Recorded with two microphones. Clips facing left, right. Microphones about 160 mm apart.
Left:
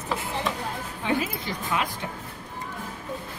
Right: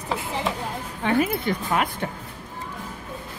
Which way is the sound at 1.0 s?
55° right (ahead or behind).